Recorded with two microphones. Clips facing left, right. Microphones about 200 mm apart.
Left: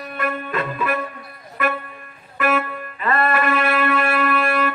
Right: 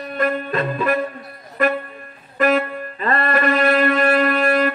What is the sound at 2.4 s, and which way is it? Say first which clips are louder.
Music: right 4 dB; 35° right (ahead or behind).